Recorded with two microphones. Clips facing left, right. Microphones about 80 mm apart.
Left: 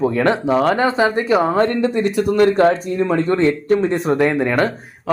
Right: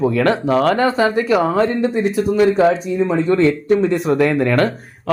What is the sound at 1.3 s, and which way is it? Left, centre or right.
Speech, centre.